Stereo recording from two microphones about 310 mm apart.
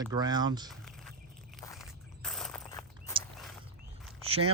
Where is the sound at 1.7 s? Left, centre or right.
Centre.